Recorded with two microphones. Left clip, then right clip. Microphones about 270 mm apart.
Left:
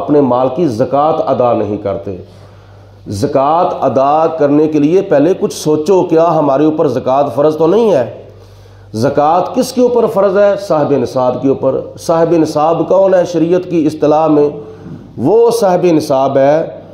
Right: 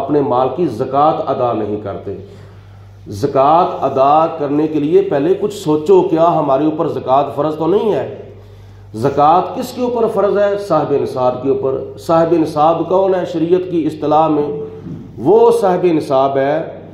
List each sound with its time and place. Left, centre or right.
0.1 s a man's voice: left
3.1 s a man's voice: left